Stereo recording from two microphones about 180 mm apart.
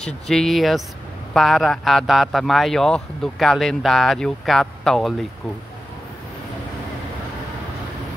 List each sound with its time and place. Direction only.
0.0 s a man's voice: centre (ahead or behind)